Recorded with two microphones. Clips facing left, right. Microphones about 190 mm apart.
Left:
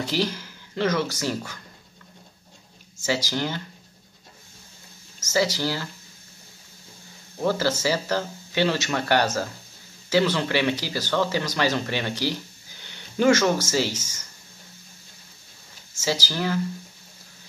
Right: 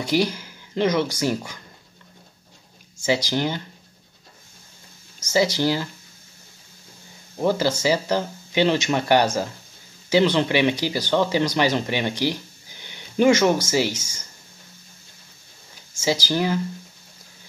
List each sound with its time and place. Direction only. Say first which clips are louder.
0.0 s speech: right 4 dB; 10° right (ahead or behind)
3.3 s speech: right 4 dB; 15° right (ahead or behind)
5.2 s speech: right 4 dB; 15° right (ahead or behind)
7.3 s speech: right 2 dB; 15° right (ahead or behind)
16.0 s speech: right 4 dB; 15° right (ahead or behind)